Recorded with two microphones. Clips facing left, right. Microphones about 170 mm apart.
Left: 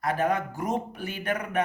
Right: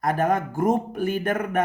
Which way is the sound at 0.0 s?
45° right (ahead or behind).